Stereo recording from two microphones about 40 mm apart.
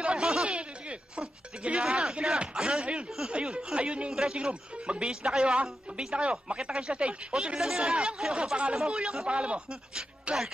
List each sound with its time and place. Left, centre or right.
0.0 s a sound: right
1.8 s speech: centre
7.5 s speech: centre
8.4 s speech: right